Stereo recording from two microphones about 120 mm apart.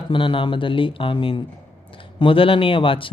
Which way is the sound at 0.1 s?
45° left (ahead or behind).